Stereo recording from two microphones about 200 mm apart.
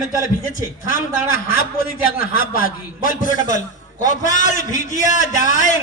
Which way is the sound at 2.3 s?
45° left (ahead or behind).